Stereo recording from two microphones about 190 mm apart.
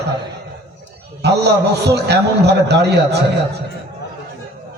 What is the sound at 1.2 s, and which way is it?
A man's voice, 60° right (ahead or behind).